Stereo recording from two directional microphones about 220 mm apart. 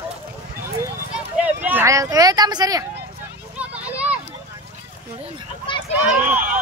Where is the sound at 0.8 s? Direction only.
5° right (ahead or behind).